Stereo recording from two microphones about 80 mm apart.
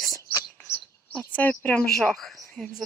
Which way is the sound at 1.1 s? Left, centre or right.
Centre.